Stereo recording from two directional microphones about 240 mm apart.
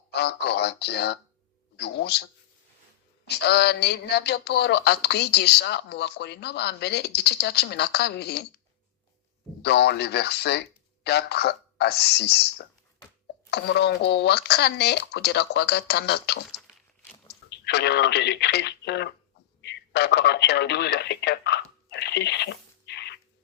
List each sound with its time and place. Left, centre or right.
0.1 s speech: left
3.2 s speech: left
16.6 s crunch: centre
17.7 s speech: left